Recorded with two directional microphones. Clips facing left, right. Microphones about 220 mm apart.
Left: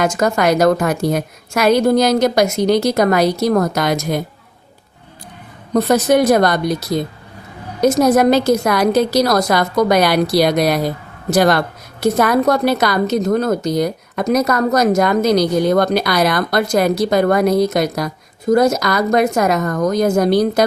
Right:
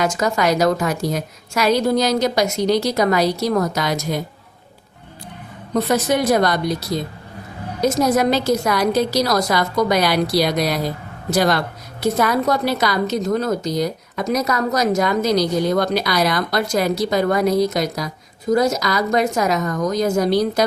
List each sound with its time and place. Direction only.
0.0 s a woman's voice: 50° left (ahead or behind)
5.7 s a woman's voice: 45° left (ahead or behind)
7.8 s a woman's voice: 55° left (ahead or behind)